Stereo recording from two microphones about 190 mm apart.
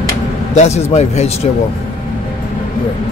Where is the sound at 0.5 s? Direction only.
35° left (ahead or behind).